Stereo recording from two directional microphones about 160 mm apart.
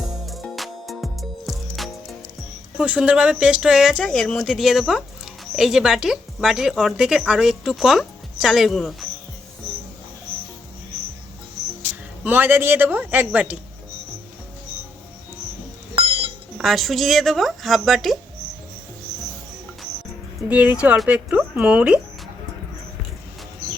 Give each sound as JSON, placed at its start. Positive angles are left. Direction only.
{"t": 0.3, "sound": "music", "side_deg": 0}
{"t": 2.7, "sound": "speech", "side_deg": -5}
{"t": 12.2, "sound": "speech", "side_deg": -10}
{"t": 16.6, "sound": "speech", "side_deg": 0}
{"t": 20.5, "sound": "speech", "side_deg": -10}